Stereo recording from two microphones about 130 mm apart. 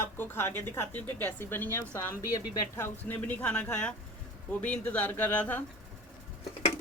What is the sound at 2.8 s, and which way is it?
Speech, 10° left (ahead or behind).